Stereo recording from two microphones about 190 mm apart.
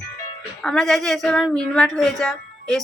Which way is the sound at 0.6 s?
Centre (ahead or behind).